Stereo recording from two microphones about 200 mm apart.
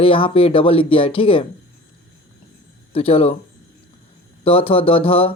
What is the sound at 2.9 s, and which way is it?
Speech, 30° left (ahead or behind).